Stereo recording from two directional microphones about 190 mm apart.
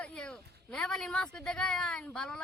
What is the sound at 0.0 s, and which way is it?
Speech, 5° left (ahead or behind).